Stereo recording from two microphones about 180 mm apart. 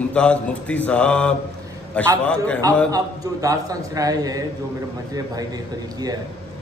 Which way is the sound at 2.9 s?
20° right (ahead or behind).